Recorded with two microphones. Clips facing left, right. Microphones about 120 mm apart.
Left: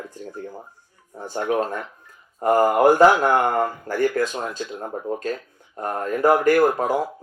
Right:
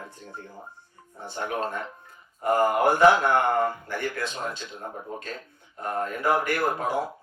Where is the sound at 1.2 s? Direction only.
40° left (ahead or behind).